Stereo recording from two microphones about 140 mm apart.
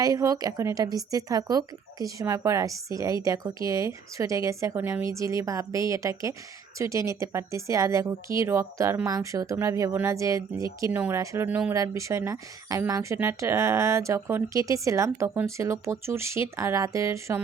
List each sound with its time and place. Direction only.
0.0 s speech: 25° right (ahead or behind)
11.7 s speech: 25° right (ahead or behind)